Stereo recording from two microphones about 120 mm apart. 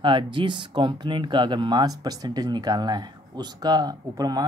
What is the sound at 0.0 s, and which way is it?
Speech, 40° right (ahead or behind).